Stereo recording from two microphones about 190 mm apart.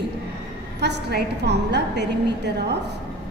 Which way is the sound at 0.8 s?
60° right (ahead or behind).